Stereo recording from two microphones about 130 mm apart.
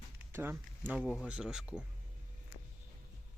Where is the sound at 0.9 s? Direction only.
5° left (ahead or behind).